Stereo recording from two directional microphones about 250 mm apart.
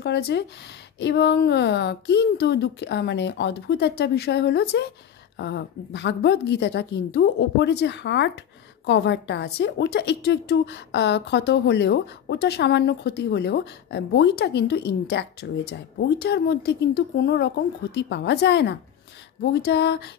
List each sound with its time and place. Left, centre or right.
0.0 s a woman's voice: left